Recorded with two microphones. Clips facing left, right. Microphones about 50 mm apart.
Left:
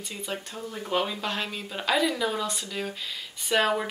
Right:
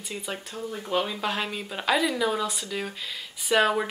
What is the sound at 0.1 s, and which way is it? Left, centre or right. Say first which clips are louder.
Speech: right 1 dB; centre.